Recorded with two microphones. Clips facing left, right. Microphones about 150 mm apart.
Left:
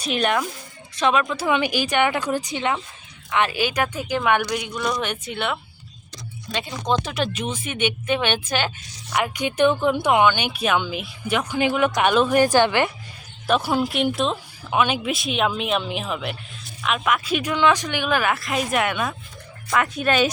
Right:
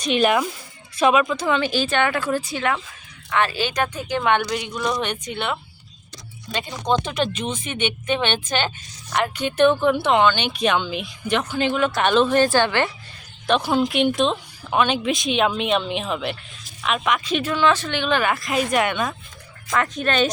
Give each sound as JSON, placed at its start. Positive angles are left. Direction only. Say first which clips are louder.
{"t": 0.0, "sound": "a woman's voice", "louder": "right 3 dB", "side_deg": 0}
{"t": 1.5, "sound": "a woman's voice", "louder": "even", "side_deg": 15}